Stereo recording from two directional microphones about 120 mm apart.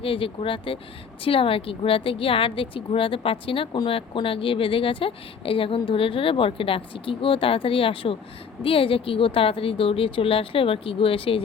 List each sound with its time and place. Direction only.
0.0 s a woman's voice: 50° left (ahead or behind)